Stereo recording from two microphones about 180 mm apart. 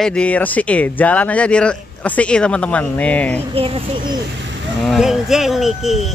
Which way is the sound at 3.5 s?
30° right (ahead or behind).